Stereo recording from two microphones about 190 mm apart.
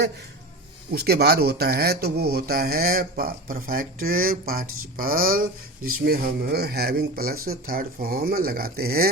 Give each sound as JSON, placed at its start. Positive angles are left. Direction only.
{"t": 0.9, "sound": "speech", "side_deg": -55}